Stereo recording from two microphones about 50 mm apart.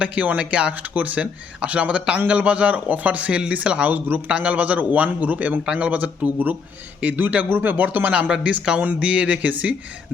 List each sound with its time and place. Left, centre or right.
0.0 s speech: right
8.3 s speech: right